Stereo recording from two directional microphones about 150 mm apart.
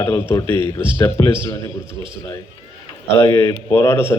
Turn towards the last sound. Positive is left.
turn(degrees=15)  # may be behind; listen again after turning